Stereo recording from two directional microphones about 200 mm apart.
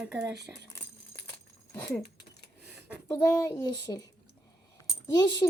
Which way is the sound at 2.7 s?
5° right (ahead or behind).